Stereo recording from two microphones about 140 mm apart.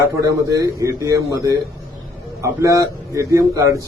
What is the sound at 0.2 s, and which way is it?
A man's voice, 25° right (ahead or behind).